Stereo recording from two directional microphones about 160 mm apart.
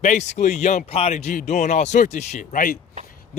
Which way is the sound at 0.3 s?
45° left (ahead or behind).